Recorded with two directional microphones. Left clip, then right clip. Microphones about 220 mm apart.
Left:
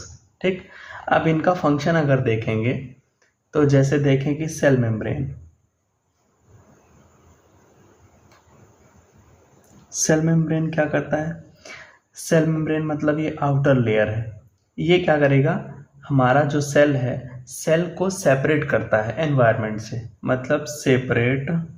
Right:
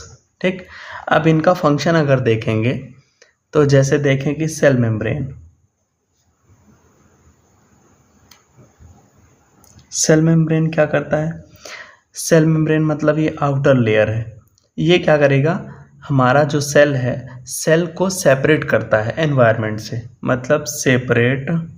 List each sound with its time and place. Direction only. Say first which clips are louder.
0.3 s speech: right 3 dB; 45° right (ahead or behind)
10.0 s speech: right 6 dB; 45° right (ahead or behind)